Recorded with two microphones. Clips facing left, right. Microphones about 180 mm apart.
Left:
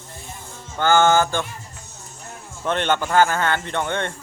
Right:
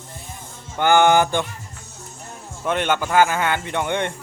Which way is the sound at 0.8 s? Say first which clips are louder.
Right 1 dB; 15° right (ahead or behind).